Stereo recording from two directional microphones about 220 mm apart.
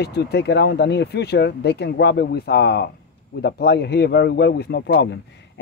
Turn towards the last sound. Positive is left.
turn(degrees=50)  # may be behind; listen again after turning